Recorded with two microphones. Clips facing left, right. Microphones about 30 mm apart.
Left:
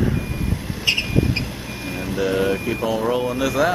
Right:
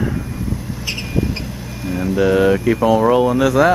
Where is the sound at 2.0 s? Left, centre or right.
Centre.